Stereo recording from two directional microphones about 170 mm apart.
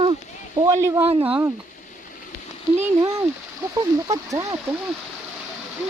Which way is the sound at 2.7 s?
15° right (ahead or behind).